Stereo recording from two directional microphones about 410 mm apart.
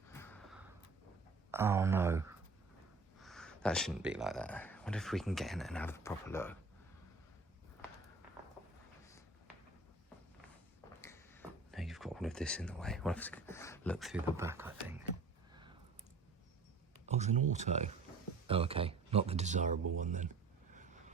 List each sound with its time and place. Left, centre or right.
0.1 s gasp: centre
1.5 s speech: centre
11.0 s speech: centre
17.1 s speech: centre